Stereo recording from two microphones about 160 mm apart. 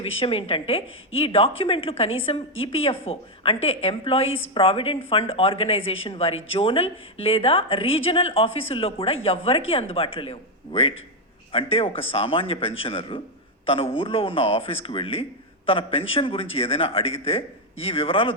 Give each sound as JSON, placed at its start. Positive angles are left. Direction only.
{"t": 0.0, "sound": "a man's voice", "side_deg": 35}